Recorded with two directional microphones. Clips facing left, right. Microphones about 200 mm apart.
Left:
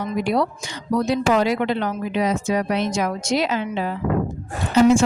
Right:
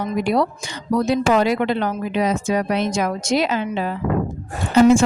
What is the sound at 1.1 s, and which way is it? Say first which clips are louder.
A woman's voice: right 2 dB; 50° right (ahead or behind).